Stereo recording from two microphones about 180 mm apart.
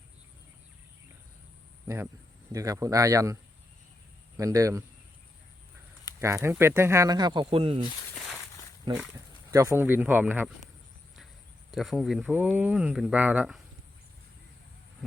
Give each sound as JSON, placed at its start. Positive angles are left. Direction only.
{"t": 2.5, "sound": "speech", "side_deg": -20}
{"t": 4.4, "sound": "speech", "side_deg": -20}
{"t": 6.1, "sound": "speech", "side_deg": -15}
{"t": 9.1, "sound": "speech", "side_deg": -20}
{"t": 11.7, "sound": "speech", "side_deg": 0}